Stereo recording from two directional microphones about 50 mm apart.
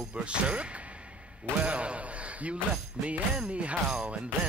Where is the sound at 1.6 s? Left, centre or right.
Right.